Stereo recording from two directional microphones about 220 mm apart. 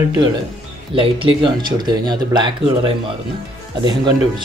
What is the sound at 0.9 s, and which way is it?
Speech, 25° right (ahead or behind).